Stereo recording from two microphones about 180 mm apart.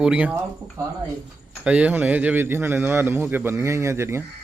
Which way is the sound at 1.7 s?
10° right (ahead or behind).